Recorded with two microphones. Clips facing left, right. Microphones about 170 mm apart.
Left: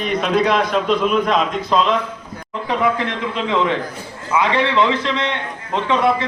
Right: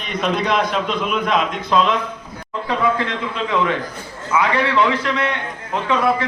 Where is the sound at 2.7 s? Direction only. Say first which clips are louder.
Left 1 dB; 20° left (ahead or behind).